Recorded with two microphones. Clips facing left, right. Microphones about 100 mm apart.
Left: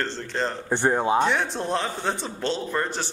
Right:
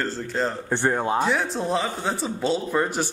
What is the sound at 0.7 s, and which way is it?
Snicker, 15° left (ahead or behind).